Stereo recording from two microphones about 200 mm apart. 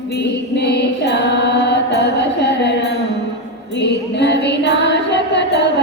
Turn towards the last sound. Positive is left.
turn(degrees=60)  # may be behind; listen again after turning